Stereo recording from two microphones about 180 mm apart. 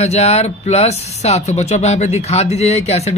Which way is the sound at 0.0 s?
35° left (ahead or behind).